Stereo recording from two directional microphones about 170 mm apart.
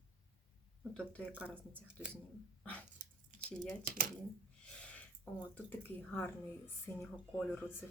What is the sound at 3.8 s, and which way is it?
Speech, 55° right (ahead or behind).